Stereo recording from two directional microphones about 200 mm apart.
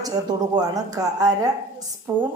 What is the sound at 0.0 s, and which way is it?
Speech, 20° right (ahead or behind).